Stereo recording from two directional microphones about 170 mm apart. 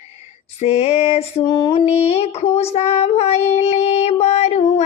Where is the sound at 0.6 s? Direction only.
40° left (ahead or behind).